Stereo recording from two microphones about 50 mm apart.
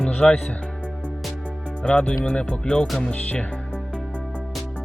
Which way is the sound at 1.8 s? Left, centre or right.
Centre.